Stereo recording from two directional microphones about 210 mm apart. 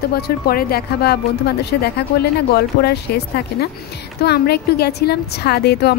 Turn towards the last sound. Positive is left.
turn(degrees=50)  # may be behind; listen again after turning